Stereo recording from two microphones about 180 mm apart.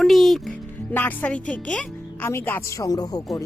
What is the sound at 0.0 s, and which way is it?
Music, centre (ahead or behind).